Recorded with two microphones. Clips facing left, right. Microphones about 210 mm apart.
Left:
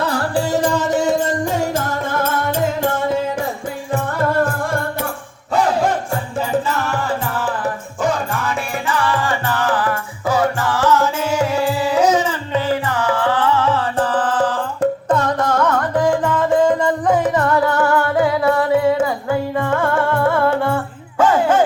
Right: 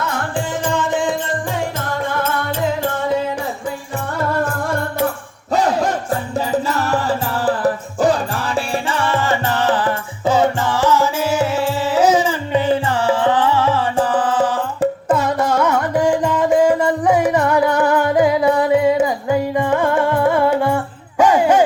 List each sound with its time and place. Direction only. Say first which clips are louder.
0.0 s music: left 3 dB; 35° left (ahead or behind)
7.4 s music: right 5 dB; 35° right (ahead or behind); by 21.6 s 15° right (ahead or behind)